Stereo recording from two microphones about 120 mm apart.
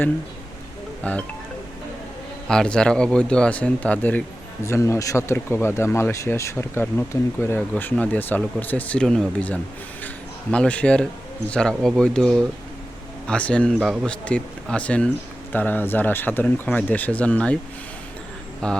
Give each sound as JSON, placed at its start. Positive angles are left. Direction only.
{"t": 1.0, "sound": "speech", "side_deg": 10}
{"t": 2.5, "sound": "speech", "side_deg": 5}
{"t": 4.6, "sound": "speech", "side_deg": 25}
{"t": 13.8, "sound": "speech", "side_deg": 0}
{"t": 14.1, "sound": "speech", "side_deg": 10}
{"t": 18.6, "sound": "speech", "side_deg": 10}